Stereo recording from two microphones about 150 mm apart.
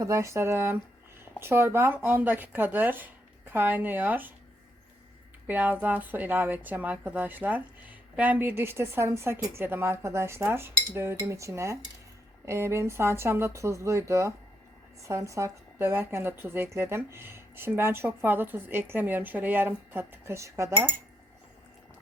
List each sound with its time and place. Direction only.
0.0 s a woman's voice: 20° right (ahead or behind)
5.5 s a woman's voice: 10° right (ahead or behind)